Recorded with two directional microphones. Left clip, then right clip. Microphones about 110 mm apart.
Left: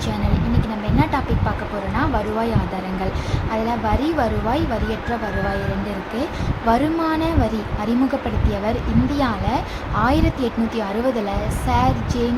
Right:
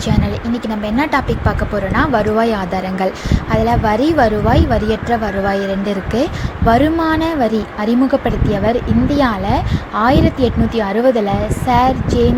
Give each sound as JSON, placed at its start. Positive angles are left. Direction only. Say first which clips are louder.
{"t": 2.0, "sound": "speech", "louder": "right 8 dB", "side_deg": -80}
{"t": 3.5, "sound": "speech", "louder": "right 7 dB", "side_deg": -65}
{"t": 6.7, "sound": "a woman's voice", "louder": "right 6 dB", "side_deg": -60}